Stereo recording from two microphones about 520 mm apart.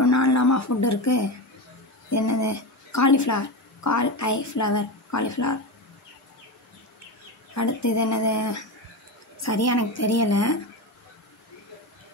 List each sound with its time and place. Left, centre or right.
0.0 s a woman's voice: left
7.5 s a woman's voice: left